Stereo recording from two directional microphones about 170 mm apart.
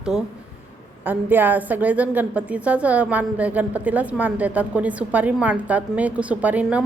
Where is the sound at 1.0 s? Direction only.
10° right (ahead or behind).